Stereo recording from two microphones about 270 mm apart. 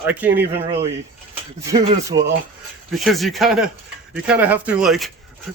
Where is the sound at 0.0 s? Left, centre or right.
Centre.